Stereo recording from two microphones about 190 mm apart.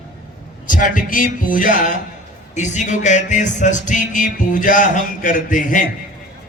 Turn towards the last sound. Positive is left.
turn(degrees=45)  # may be behind; listen again after turning